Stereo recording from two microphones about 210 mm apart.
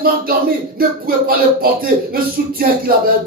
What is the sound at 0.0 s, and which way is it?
A man's voice, 45° right (ahead or behind).